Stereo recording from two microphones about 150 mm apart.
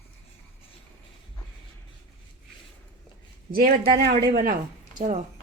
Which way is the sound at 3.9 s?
90° right.